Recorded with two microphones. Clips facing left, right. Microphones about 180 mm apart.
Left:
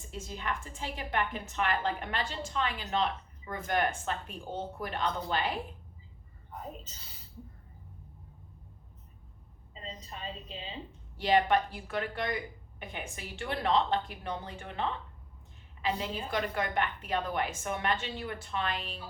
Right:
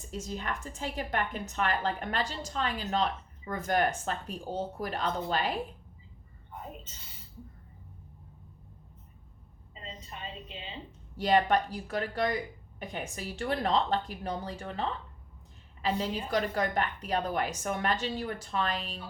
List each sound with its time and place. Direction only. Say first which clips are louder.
0.1 s a woman's voice: right 1 dB; 40° right (ahead or behind)
11.2 s a woman's voice: right 1 dB; 40° right (ahead or behind)